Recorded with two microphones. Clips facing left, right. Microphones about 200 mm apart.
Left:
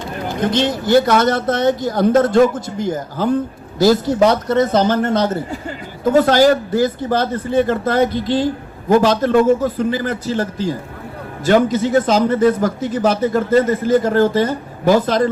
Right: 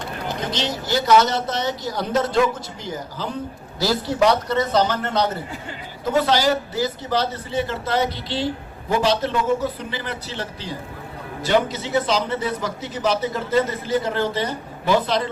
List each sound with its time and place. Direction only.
0.3 s speech: 55° left (ahead or behind)